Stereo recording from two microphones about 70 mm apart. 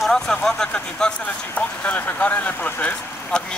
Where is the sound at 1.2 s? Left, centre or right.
Left.